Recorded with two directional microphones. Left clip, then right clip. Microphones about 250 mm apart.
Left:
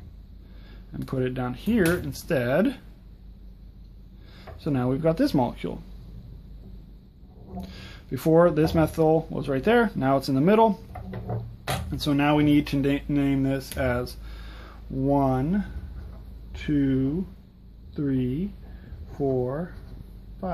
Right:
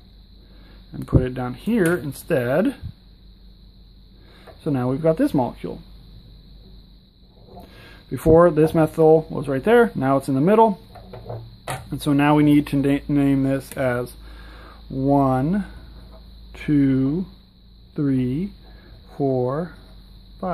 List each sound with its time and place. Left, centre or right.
1.0 s speech: centre
4.4 s speech: centre
7.6 s speech: centre
11.9 s speech: centre